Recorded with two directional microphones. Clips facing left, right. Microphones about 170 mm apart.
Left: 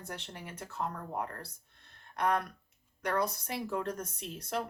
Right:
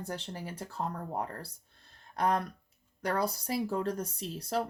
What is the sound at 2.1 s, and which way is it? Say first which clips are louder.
Speech: right 1 dB; 35° right (ahead or behind).